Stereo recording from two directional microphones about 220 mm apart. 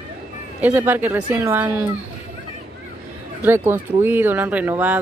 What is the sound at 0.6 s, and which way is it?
Speech, 10° right (ahead or behind).